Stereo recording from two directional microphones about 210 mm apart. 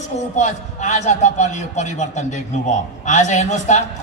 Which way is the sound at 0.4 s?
35° left (ahead or behind).